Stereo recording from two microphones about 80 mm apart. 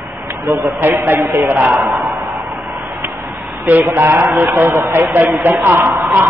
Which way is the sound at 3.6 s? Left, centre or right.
Right.